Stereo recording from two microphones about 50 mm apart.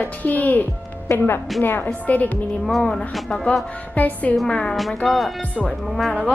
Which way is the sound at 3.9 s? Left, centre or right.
Left.